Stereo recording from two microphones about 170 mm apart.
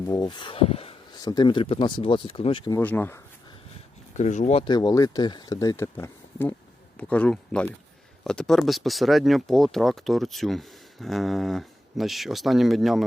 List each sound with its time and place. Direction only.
0.0 s speech: 20° left (ahead or behind)
1.1 s speech: 25° left (ahead or behind)
2.7 s speech: 10° left (ahead or behind)
4.1 s speech: 45° left (ahead or behind)
4.6 s speech: 25° left (ahead or behind); by 13.1 s centre (ahead or behind)